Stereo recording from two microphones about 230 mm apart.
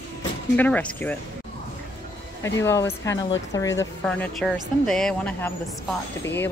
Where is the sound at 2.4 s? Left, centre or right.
Centre.